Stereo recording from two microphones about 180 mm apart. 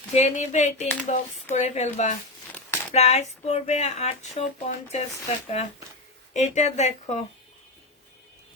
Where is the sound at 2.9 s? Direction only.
35° left (ahead or behind).